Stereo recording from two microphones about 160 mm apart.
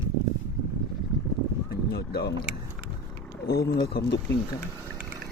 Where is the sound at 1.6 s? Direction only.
75° left (ahead or behind).